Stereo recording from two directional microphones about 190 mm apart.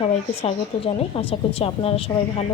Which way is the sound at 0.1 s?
30° left (ahead or behind).